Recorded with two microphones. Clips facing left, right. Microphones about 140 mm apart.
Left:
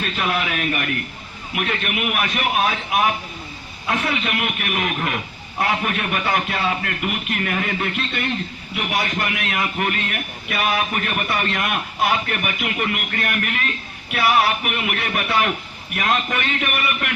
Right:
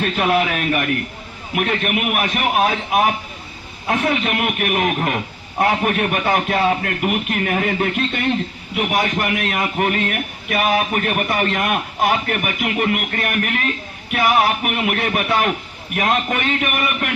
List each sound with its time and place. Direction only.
0.0 s a man's voice: 55° right (ahead or behind)
1.5 s a man's voice: 50° right (ahead or behind)